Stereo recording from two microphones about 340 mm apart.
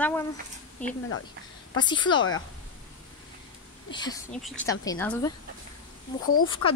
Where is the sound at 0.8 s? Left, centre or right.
Centre.